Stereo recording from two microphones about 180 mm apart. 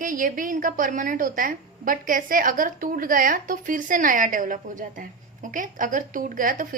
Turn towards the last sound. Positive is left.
turn(degrees=-50)  # may be behind; listen again after turning